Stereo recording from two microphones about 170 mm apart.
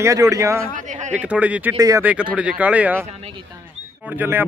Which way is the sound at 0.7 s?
45° right (ahead or behind).